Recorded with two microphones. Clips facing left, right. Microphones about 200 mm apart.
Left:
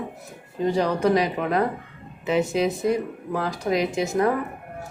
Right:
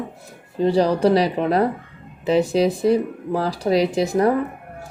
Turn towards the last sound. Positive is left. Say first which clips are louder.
# right 4 dB
turn(degrees=-35)  # may be behind; listen again after turning